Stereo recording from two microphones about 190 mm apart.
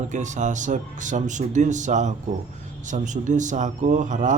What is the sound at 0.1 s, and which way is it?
Speech, 40° right (ahead or behind).